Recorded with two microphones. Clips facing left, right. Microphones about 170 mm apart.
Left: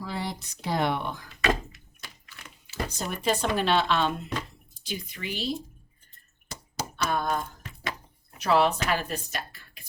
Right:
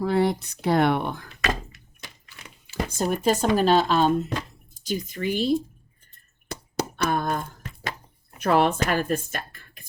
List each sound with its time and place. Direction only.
0.0 s speech: 55° right (ahead or behind)
2.6 s speech: 45° right (ahead or behind)
6.5 s a sound: 60° right (ahead or behind)
8.4 s speech: 50° right (ahead or behind)